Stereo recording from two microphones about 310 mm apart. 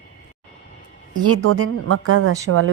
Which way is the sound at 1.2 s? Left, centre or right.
Right.